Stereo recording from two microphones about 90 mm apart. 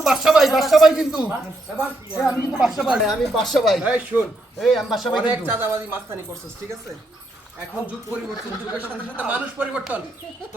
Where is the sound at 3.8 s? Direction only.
15° right (ahead or behind).